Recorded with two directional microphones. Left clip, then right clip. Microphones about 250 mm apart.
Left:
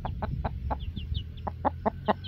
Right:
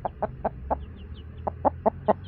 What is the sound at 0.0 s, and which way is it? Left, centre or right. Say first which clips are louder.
Chicken: right 7 dB; left.